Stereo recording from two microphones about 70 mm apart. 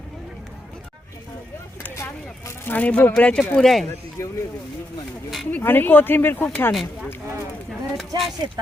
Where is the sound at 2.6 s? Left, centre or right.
Left; by 3.8 s centre.